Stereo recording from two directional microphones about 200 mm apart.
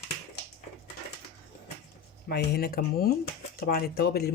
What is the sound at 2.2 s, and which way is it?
Speech, 50° left (ahead or behind).